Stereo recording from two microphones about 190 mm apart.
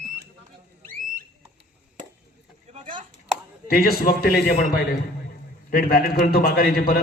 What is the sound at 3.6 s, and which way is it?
A man's voice, 50° left (ahead or behind).